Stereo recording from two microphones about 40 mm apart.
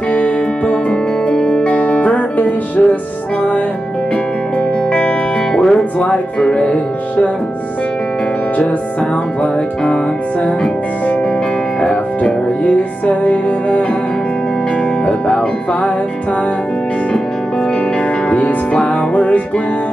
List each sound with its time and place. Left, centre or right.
0.1 s music: left
5.5 s music: centre
5.9 s speech: left
11.8 s music: left
18.3 s music: left